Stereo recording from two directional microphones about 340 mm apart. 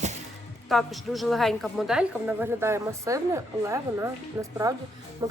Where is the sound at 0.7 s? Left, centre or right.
Centre.